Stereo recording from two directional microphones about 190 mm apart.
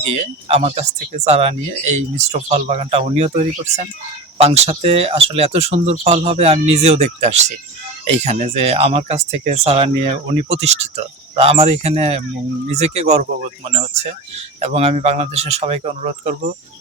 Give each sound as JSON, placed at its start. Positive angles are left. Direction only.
{"t": 0.4, "sound": "speech", "side_deg": -35}